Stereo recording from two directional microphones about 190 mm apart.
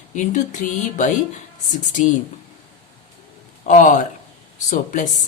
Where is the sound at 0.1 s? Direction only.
40° left (ahead or behind).